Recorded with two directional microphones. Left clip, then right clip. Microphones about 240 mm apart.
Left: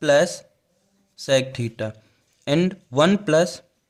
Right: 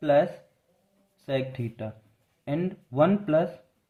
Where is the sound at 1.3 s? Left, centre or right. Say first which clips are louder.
Left 9 dB; left.